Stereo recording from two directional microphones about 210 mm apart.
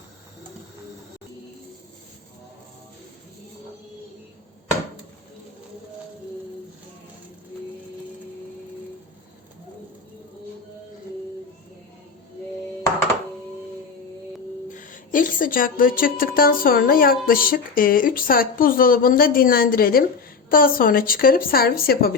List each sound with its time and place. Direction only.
14.7 s a woman's voice: 40° left (ahead or behind)